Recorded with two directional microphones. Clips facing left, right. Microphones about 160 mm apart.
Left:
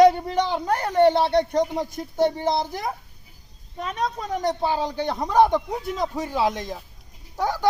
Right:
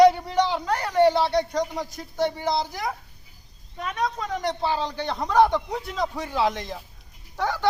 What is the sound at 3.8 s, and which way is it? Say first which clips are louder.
A man's voice: even; 25° left (ahead or behind).